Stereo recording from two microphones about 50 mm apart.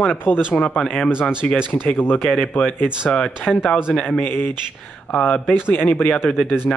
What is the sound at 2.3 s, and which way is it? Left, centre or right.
Speech, left.